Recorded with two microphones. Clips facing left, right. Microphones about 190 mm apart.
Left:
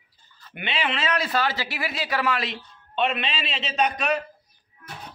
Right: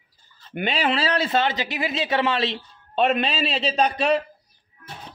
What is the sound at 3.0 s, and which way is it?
A man's voice, 40° right (ahead or behind).